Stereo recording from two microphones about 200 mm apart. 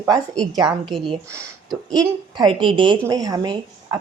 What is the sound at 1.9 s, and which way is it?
A woman's voice, 20° right (ahead or behind).